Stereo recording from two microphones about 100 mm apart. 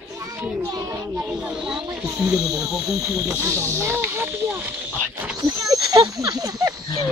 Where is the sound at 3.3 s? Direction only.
30° right (ahead or behind).